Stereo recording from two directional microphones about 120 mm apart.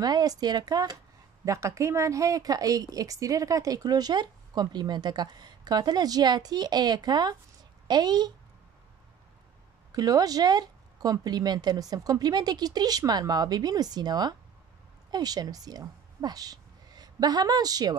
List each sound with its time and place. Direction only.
0.0 s speech: 35° right (ahead or behind)
9.9 s a woman's voice: 30° right (ahead or behind)